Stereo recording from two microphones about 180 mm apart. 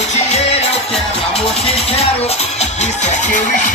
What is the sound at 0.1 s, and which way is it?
Music, 40° left (ahead or behind).